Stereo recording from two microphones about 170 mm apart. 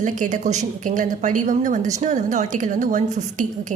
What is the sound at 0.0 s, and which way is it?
Speech, 45° right (ahead or behind).